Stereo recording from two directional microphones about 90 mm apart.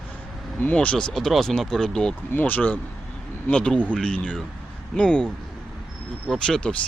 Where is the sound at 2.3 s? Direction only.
20° left (ahead or behind).